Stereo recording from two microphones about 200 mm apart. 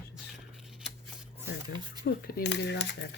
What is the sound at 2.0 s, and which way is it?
Speech, 55° left (ahead or behind).